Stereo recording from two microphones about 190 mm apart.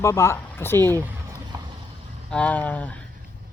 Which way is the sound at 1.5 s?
20° right (ahead or behind).